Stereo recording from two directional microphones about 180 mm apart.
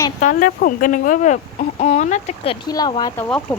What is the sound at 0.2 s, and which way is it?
Speech, 45° left (ahead or behind).